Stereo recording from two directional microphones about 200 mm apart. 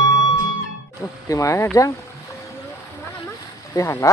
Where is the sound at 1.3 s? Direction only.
15° left (ahead or behind).